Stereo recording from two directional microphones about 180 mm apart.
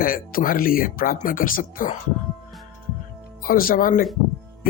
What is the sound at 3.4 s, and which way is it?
Speech, 55° left (ahead or behind).